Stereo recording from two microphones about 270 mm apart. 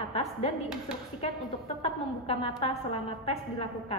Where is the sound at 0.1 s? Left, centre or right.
Left.